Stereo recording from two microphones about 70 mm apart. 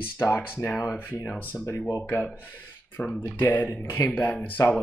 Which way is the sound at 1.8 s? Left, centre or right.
Left.